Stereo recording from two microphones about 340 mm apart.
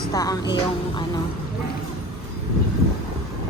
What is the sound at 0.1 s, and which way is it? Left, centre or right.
Speech, centre.